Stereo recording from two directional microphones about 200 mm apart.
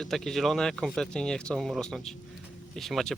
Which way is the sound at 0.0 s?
Centre (ahead or behind).